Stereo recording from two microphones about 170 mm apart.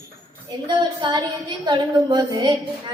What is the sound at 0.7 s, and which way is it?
A woman's voice, 25° right (ahead or behind).